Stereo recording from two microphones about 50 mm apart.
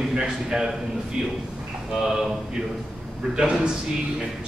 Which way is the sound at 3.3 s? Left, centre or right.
Centre.